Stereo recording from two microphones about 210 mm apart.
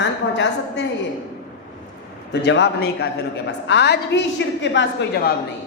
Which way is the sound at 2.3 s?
55° left (ahead or behind).